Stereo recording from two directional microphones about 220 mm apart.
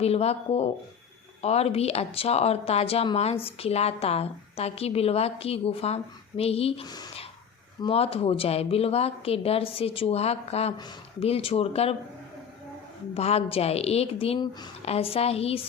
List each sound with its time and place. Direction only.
0.0 s speech: 30° left (ahead or behind)
13.1 s speech: 30° left (ahead or behind)